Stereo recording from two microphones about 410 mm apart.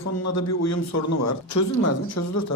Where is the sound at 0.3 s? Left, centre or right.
Left.